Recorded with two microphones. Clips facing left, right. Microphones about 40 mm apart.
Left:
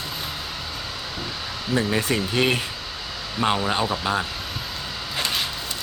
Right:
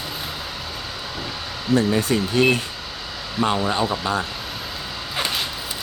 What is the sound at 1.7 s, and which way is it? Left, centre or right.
Speech, centre.